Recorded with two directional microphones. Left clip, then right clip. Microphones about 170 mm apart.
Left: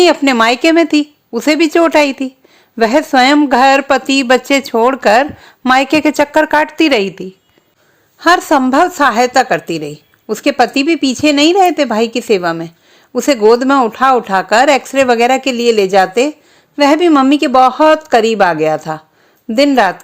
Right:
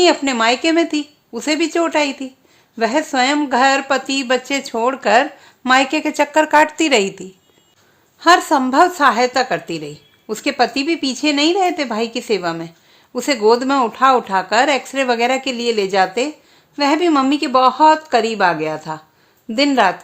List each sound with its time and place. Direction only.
0.0 s speech: 45° left (ahead or behind)